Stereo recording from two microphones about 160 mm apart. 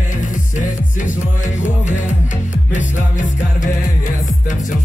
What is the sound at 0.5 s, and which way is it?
Music, 50° left (ahead or behind).